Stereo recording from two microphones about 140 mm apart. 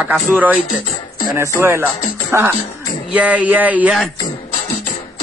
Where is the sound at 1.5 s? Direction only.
15° right (ahead or behind).